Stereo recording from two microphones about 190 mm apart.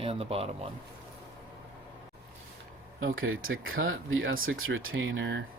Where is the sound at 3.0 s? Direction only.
90° right.